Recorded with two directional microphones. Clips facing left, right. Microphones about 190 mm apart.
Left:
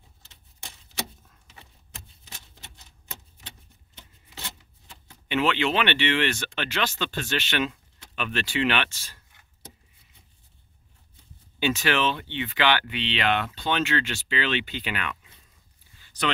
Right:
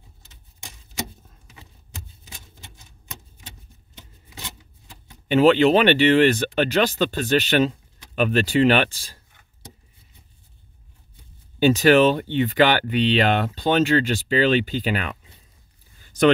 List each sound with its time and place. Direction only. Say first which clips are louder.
5.3 s speech: right 10 dB; 40° right (ahead or behind)
11.6 s speech: right 10 dB; 40° right (ahead or behind)
16.0 s a sound: right 12 dB; 45° right (ahead or behind)